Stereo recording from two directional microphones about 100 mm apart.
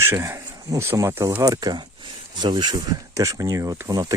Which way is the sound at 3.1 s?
35° right (ahead or behind).